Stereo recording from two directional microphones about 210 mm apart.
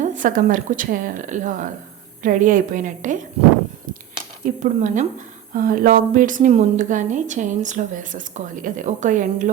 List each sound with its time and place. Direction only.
0.0 s a woman's voice: 40° right (ahead or behind)
4.6 s a woman's voice: 35° right (ahead or behind)